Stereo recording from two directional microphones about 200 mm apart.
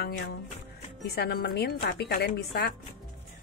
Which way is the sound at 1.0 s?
50° left (ahead or behind).